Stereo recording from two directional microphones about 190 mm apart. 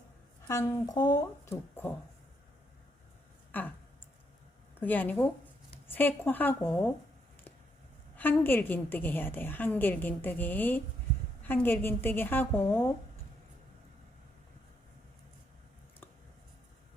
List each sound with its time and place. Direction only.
0.4 s a woman's voice: 15° left (ahead or behind)
4.8 s a woman's voice: 10° left (ahead or behind)
8.1 s a woman's voice: 10° left (ahead or behind)